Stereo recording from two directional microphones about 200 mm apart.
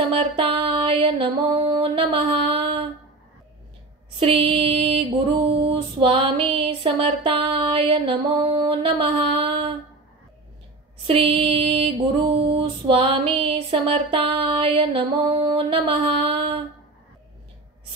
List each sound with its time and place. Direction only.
0.1 s music: 25° right (ahead or behind)
4.2 s music: 30° right (ahead or behind)
11.1 s music: 30° right (ahead or behind)